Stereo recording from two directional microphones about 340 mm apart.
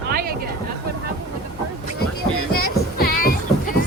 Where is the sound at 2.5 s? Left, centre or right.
Left.